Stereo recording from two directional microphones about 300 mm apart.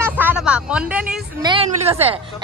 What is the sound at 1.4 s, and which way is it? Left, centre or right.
Speech, centre.